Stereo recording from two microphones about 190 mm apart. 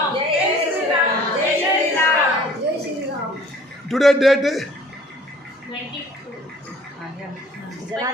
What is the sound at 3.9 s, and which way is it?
Speech, centre (ahead or behind).